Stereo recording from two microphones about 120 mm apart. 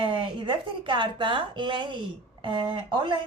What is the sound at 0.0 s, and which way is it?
A woman's voice, 45° right (ahead or behind).